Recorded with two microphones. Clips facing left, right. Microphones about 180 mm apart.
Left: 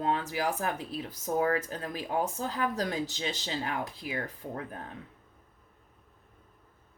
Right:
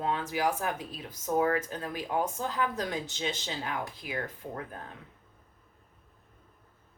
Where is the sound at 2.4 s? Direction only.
35° left (ahead or behind).